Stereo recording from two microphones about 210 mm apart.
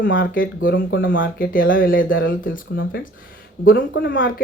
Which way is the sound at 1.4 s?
40° left (ahead or behind).